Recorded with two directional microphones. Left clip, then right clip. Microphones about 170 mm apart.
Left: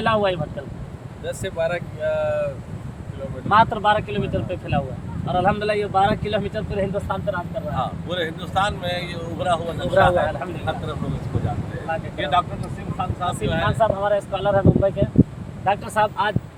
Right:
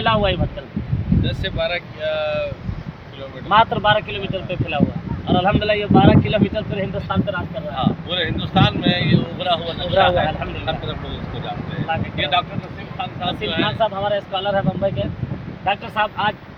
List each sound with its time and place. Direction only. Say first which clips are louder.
0.0 s speech: right 2 dB; 10° right (ahead or behind)
1.3 s speech: left 1 dB; 25° left (ahead or behind)
3.5 s speech: right 2 dB; 15° right (ahead or behind)
7.8 s speech: right 4 dB; 5° left (ahead or behind)
12.1 s speech: even; 5° left (ahead or behind); by 16.3 s 15° right (ahead or behind)